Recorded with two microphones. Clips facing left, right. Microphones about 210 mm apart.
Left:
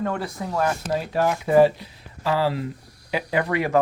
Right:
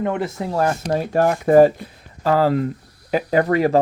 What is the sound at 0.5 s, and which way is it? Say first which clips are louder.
Speech: right 3 dB; 40° right (ahead or behind).